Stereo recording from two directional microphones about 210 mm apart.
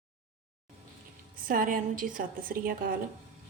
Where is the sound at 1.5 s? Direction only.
40° right (ahead or behind).